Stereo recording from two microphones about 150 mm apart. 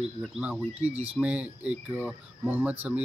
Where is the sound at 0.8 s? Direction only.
45° right (ahead or behind).